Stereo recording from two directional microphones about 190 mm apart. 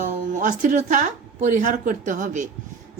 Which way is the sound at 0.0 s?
40° right (ahead or behind).